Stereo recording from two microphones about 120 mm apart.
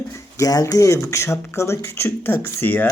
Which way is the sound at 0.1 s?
30° left (ahead or behind).